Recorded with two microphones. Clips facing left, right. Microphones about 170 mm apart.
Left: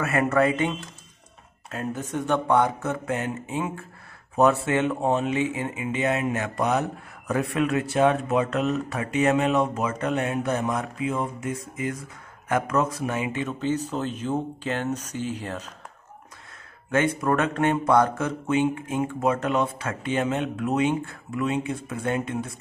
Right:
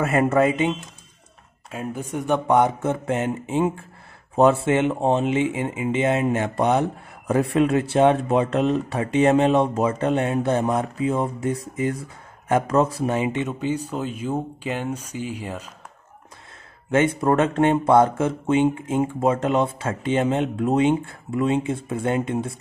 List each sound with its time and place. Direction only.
0.0 s speech: 25° right (ahead or behind); by 15.7 s 10° right (ahead or behind)
16.9 s speech: 25° right (ahead or behind)